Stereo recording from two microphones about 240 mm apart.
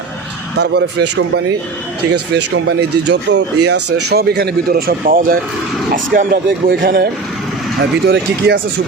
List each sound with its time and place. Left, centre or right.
0.6 s speech: right